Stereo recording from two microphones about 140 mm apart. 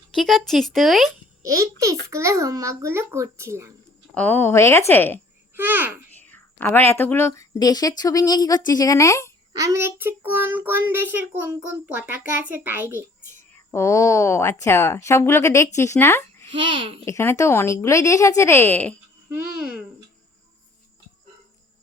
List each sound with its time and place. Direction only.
0.1 s speech: centre (ahead or behind)
1.4 s a child's voice: 25° right (ahead or behind)
4.1 s a woman's voice: 10° left (ahead or behind)
5.5 s a child's voice: 15° right (ahead or behind)
6.2 s a woman's voice: 15° left (ahead or behind)
9.5 s a child's voice: 25° right (ahead or behind)
13.3 s a woman's voice: 15° left (ahead or behind)
16.6 s a child's voice: 35° right (ahead or behind)
17.1 s a woman's voice: 20° left (ahead or behind)
19.3 s a child's voice: 10° right (ahead or behind)